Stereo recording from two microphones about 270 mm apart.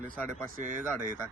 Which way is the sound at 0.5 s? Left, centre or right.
Right.